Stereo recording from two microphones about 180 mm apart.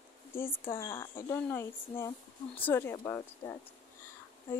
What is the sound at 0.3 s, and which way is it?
Speech, 15° left (ahead or behind).